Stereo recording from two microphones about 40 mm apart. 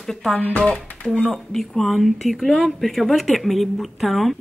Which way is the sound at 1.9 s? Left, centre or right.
Centre.